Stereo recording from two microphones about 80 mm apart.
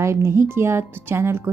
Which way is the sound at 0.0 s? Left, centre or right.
Right.